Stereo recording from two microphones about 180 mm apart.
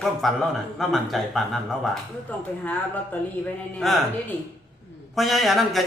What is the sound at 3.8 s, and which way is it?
A man's voice, centre (ahead or behind).